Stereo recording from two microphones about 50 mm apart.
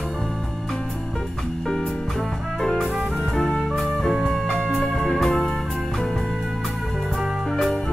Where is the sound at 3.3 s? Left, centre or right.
Centre.